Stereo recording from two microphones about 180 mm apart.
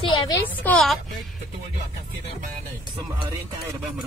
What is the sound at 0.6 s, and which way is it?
Speech, 5° left (ahead or behind).